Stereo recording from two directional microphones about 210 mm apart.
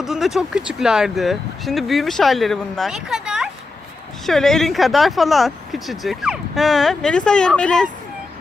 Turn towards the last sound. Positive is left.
turn(degrees=5)  # may be behind; listen again after turning